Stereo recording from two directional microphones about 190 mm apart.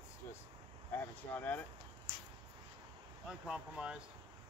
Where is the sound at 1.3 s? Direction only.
10° left (ahead or behind).